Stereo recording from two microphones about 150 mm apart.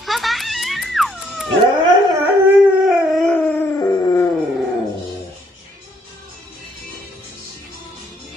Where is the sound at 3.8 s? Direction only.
20° left (ahead or behind).